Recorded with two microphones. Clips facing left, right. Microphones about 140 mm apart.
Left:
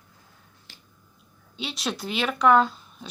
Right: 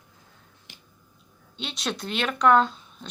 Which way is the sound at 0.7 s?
20° right (ahead or behind).